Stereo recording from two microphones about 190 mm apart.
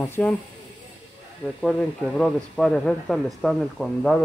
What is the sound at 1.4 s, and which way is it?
Speech, 5° left (ahead or behind).